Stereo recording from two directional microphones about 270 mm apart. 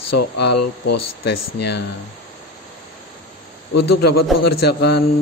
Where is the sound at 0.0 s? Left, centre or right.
Left.